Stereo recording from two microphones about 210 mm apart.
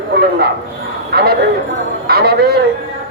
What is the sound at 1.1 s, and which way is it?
A man's voice, 50° right (ahead or behind).